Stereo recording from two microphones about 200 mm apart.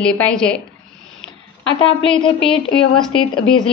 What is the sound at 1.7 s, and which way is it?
Speech, 25° left (ahead or behind).